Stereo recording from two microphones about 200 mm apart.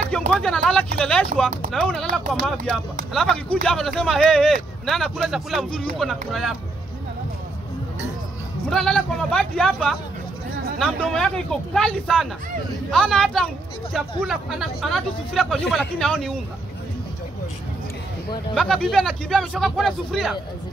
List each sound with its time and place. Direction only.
0.3 s speech: 5° left (ahead or behind)
8.6 s speech: 5° left (ahead or behind)
18.5 s speech: centre (ahead or behind)